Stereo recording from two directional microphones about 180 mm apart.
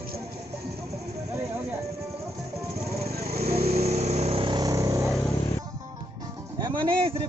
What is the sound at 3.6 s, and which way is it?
Vehicle, 35° right (ahead or behind).